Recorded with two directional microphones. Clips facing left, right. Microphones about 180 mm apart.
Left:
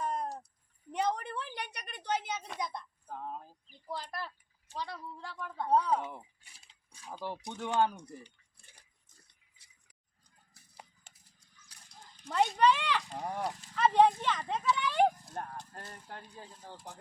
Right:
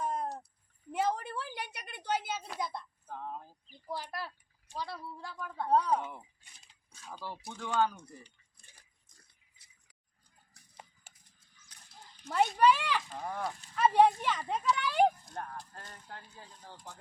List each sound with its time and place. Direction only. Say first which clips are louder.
0.0 s cat: even; 5° right (ahead or behind)
0.9 s a sound: right 1 dB; 5° right (ahead or behind)
3.8 s speech: right 1 dB; 10° right (ahead or behind); by 8.1 s 20° left (ahead or behind)
12.3 s speech: right 1 dB; centre (ahead or behind)
13.1 s livestock: left 1 dB; 15° left (ahead or behind)
13.7 s speech: even; 10° right (ahead or behind)
14.8 s a sound: right 1 dB; 10° right (ahead or behind)
15.3 s speech: left 1 dB; 20° left (ahead or behind)
16.9 s livestock: left 1 dB; 15° left (ahead or behind)